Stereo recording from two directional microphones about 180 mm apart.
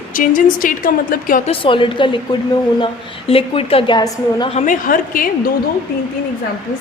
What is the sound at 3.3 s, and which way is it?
A woman's voice, 30° left (ahead or behind).